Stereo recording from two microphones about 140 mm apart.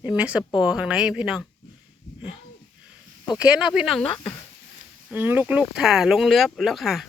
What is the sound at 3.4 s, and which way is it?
Speech, 5° right (ahead or behind).